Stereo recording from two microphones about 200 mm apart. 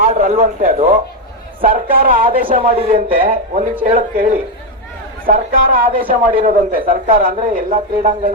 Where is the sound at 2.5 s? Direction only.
30° right (ahead or behind).